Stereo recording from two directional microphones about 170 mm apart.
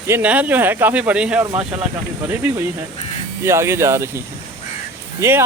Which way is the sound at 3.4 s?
15° right (ahead or behind).